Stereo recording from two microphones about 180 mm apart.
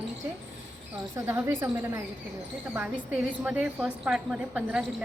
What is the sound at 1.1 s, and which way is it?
A woman's voice, 15° right (ahead or behind).